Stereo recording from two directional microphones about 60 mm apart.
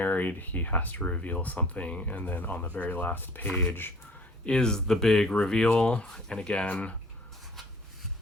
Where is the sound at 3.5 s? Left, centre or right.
Centre.